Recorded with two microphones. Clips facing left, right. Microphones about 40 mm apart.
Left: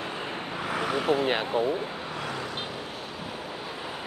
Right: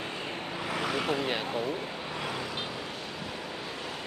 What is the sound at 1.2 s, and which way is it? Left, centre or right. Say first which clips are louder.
Speech: left 5 dB; left.